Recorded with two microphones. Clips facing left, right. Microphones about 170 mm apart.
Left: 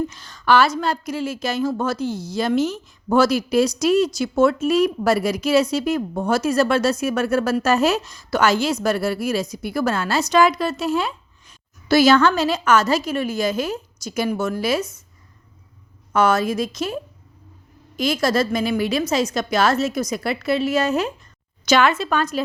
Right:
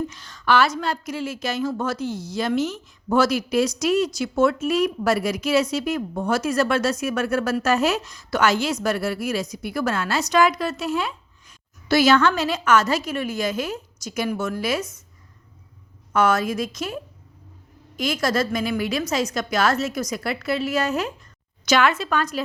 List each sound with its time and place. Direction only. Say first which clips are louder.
0.1 s a woman's voice: left 3 dB; 35° left (ahead or behind)
16.1 s a woman's voice: left 2 dB; 30° left (ahead or behind)